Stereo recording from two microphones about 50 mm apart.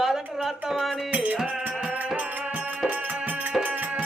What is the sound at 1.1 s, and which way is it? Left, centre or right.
Music, right.